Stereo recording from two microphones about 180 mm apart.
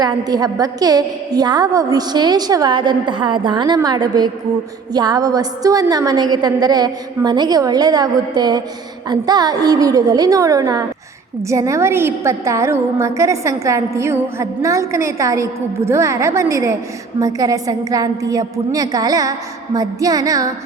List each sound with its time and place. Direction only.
0.0 s a woman's voice: 20° right (ahead or behind)